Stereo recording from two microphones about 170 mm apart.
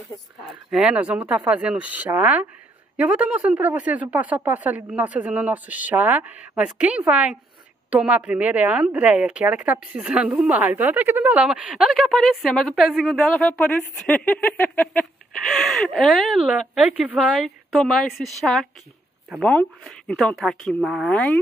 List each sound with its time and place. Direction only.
0.7 s speech: 5° right (ahead or behind)